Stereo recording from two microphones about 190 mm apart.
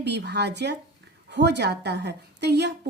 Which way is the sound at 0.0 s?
65° right (ahead or behind).